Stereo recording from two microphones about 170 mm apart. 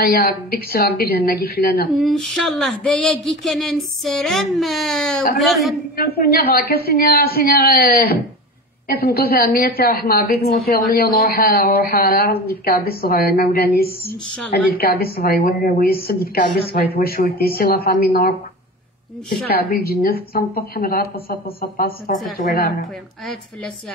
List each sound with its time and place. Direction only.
0.0 s a woman's voice: 65° left (ahead or behind)
1.9 s a sound: centre (ahead or behind)
5.9 s a woman's voice: 65° left (ahead or behind)
19.5 s a woman's voice: 65° left (ahead or behind)